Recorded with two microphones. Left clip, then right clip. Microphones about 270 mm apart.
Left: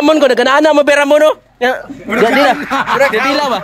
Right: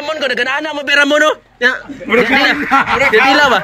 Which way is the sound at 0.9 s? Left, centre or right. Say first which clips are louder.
Left 2 dB; centre.